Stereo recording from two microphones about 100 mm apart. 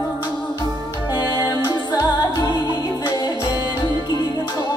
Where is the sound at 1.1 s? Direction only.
45° left (ahead or behind).